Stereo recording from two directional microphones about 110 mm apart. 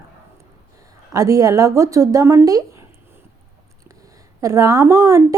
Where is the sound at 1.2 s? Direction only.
30° right (ahead or behind).